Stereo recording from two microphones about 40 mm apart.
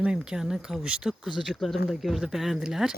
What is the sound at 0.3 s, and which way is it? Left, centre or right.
Speech, centre.